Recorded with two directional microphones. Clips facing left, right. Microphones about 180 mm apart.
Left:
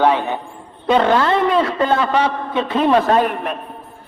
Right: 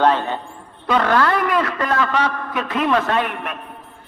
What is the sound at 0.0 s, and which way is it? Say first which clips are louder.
Speech: left 1 dB; 15° left (ahead or behind).